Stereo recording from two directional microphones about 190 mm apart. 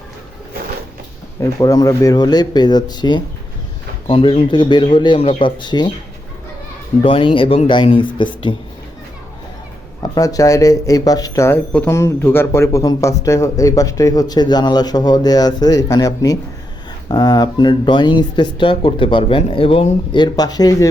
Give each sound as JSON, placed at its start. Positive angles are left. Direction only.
{"t": 1.4, "sound": "speech", "side_deg": 20}
{"t": 7.0, "sound": "speech", "side_deg": 25}
{"t": 10.0, "sound": "speech", "side_deg": 20}